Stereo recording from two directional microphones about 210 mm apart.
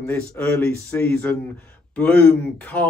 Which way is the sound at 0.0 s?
10° left (ahead or behind).